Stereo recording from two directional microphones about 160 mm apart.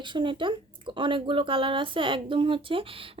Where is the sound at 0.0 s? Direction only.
30° right (ahead or behind).